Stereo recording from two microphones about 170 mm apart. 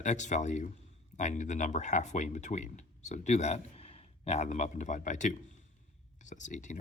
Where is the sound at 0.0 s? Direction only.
45° left (ahead or behind).